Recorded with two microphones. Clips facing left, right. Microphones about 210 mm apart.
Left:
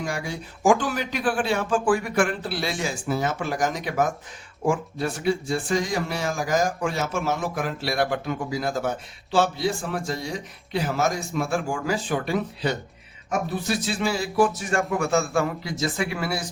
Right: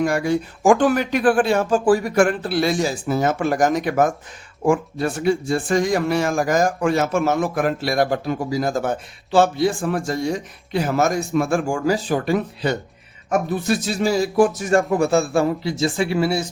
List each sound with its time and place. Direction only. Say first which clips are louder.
0.0 s speech: right 11 dB; 60° right (ahead or behind); by 16.5 s 25° right (ahead or behind)